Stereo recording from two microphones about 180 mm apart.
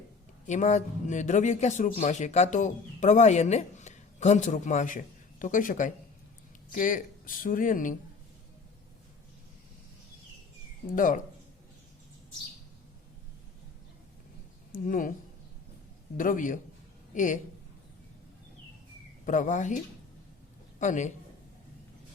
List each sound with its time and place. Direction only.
0.4 s speech: 40° left (ahead or behind)
10.8 s speech: 50° left (ahead or behind)
14.7 s speech: 50° left (ahead or behind)
16.1 s speech: 50° left (ahead or behind)
19.2 s a man's voice: 45° left (ahead or behind)